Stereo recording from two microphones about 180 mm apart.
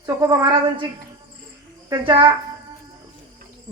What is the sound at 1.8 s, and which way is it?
Speech, 25° right (ahead or behind).